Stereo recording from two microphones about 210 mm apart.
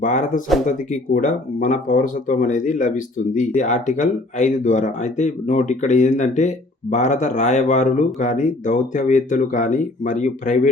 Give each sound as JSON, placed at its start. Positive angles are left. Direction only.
{"t": 0.0, "sound": "speech", "side_deg": 35}